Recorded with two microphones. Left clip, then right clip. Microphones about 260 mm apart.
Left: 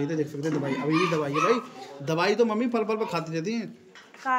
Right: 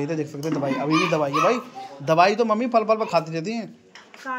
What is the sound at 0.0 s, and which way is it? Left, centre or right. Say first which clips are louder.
Speech: right 2 dB; centre.